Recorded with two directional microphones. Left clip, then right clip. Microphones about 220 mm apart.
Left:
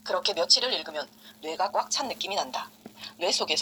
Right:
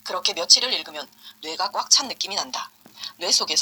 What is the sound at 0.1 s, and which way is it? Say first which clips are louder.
Speech: right 4 dB; 20° right (ahead or behind).